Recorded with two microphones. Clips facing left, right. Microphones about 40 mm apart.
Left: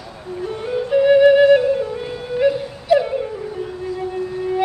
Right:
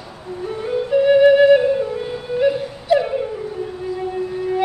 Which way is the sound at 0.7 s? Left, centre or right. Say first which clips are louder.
Even; centre.